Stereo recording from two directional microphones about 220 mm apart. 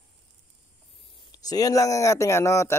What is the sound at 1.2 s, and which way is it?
Speech, 15° left (ahead or behind).